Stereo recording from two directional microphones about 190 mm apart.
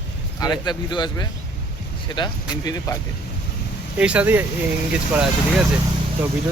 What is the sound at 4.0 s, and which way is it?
Speech, 5° right (ahead or behind).